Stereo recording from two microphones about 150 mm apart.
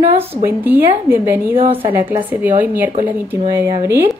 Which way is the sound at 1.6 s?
40° right (ahead or behind).